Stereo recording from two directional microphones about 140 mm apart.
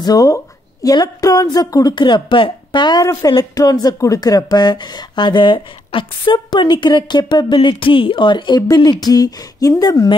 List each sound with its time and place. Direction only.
0.0 s speech: 25° left (ahead or behind)